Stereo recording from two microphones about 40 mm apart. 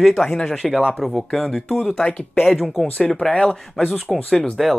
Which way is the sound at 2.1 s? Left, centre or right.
Left.